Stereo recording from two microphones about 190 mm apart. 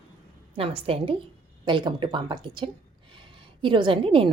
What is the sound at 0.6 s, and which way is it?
A woman's voice, 30° right (ahead or behind).